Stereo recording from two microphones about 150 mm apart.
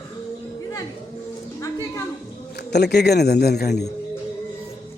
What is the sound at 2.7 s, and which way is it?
A man's voice, 90° left.